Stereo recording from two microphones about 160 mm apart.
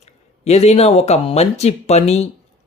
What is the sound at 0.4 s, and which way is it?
Speech, 40° left (ahead or behind).